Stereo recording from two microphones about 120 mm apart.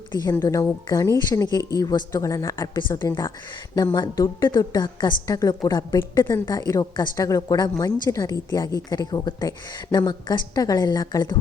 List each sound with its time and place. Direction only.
0.3 s a woman's voice: 25° left (ahead or behind)